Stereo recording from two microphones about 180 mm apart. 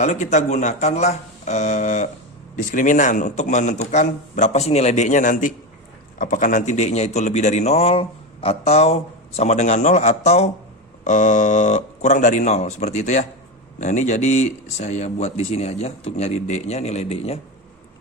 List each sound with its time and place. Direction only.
0.0 s a man's voice: 40° left (ahead or behind)